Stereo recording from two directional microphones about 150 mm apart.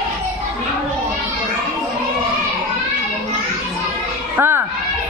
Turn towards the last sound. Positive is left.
turn(degrees=-15)  # may be behind; listen again after turning